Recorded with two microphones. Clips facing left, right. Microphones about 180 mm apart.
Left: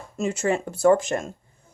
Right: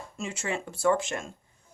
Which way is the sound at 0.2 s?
40° left (ahead or behind).